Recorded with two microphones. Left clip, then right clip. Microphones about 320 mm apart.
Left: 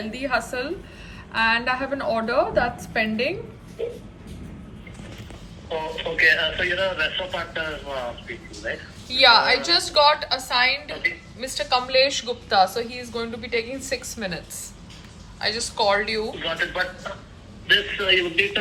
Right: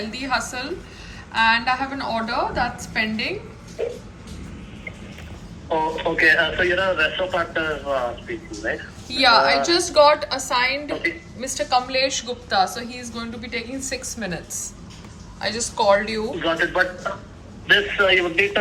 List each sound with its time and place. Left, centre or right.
0.1 s a woman's voice: centre
5.6 s a man's voice: right
9.0 s a woman's voice: centre
14.3 s a woman's voice: centre
16.4 s a man's voice: right; by 18.5 s centre